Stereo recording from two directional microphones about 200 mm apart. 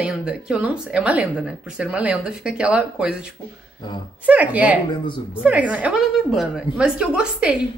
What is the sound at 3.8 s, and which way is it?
Speech, 20° left (ahead or behind).